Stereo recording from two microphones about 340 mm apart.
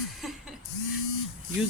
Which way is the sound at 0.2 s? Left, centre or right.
Centre.